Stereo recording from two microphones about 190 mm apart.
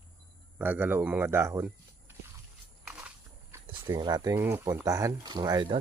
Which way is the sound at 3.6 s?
25° right (ahead or behind).